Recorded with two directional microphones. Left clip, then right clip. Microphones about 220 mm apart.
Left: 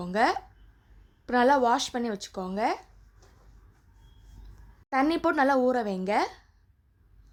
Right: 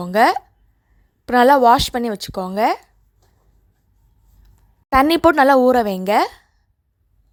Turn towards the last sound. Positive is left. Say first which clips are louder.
# right 10 dB
turn(degrees=-40)  # may be behind; listen again after turning